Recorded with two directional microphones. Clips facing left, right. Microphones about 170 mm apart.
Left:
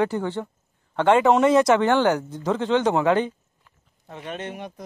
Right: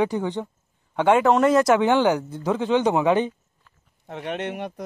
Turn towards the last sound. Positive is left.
turn(degrees=-65)  # may be behind; listen again after turning